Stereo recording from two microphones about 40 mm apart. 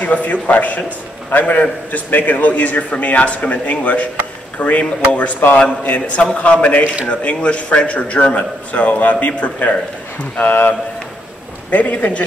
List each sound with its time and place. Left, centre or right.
0.0 s a man's voice: left
10.3 s speech: left
11.7 s a man's voice: left